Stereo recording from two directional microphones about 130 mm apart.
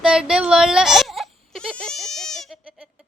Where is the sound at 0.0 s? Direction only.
5° right (ahead or behind).